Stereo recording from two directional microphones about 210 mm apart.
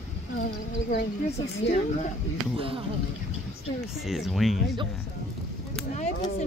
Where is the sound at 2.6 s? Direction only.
25° right (ahead or behind).